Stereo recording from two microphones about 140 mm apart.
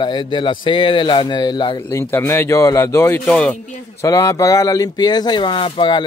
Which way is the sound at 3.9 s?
25° left (ahead or behind).